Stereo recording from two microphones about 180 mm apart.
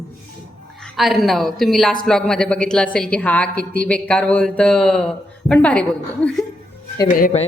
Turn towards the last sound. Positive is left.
turn(degrees=35)  # may be behind; listen again after turning